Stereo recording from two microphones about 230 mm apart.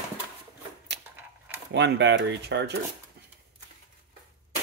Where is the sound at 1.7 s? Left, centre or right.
Right.